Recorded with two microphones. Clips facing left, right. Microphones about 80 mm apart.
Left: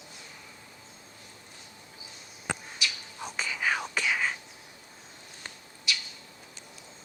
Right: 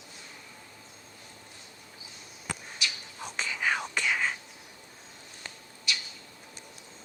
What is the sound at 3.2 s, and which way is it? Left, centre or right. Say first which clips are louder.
Whispering: even; centre.